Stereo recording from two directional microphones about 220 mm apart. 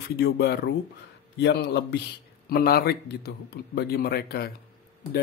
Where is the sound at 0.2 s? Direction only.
50° left (ahead or behind).